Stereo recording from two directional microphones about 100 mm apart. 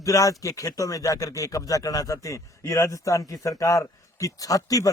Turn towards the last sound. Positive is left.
turn(degrees=35)  # may be behind; listen again after turning